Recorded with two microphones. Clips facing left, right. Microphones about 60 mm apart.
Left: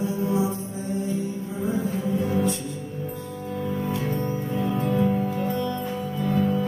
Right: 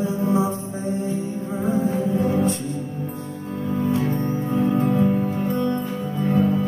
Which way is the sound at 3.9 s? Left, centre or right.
Right.